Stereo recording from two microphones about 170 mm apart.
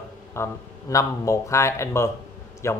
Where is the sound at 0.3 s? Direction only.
15° left (ahead or behind).